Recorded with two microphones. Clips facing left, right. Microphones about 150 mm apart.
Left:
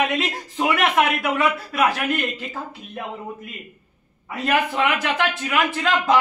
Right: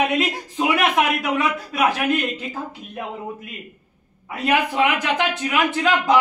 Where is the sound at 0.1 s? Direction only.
15° right (ahead or behind).